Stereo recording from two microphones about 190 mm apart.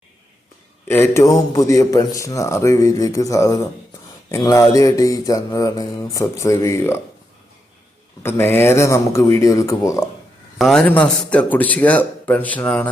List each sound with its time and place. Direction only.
1.1 s mantra: 15° left (ahead or behind)
8.2 s mantra: 10° left (ahead or behind)
10.6 s mantra: centre (ahead or behind)